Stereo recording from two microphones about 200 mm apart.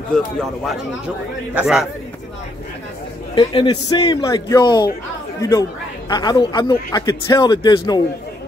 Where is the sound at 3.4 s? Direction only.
25° left (ahead or behind).